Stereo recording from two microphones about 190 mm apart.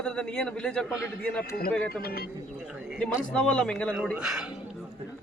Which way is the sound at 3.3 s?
5° left (ahead or behind).